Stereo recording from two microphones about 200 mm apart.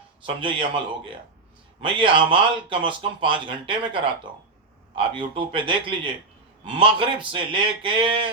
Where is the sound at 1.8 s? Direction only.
25° right (ahead or behind).